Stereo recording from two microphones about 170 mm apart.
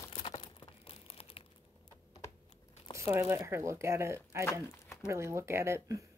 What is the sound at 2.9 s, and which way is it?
Speech, 15° right (ahead or behind).